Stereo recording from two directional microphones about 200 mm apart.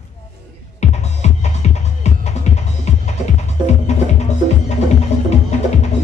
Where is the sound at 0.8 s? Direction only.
35° left (ahead or behind).